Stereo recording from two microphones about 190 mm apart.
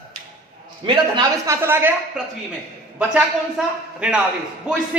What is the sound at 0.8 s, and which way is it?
Speech, 25° right (ahead or behind).